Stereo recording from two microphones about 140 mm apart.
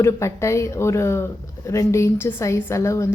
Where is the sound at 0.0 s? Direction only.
20° left (ahead or behind).